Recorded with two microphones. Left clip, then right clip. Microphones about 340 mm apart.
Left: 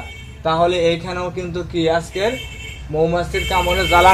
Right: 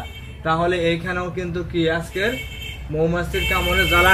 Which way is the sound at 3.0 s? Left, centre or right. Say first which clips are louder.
Even; centre.